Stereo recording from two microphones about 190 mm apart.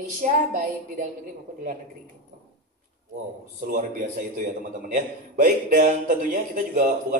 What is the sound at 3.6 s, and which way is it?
A man's voice, 45° right (ahead or behind).